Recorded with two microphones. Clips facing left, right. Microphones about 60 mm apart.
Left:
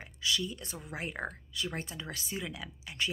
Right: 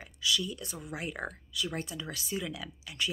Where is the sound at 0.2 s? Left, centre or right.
Left.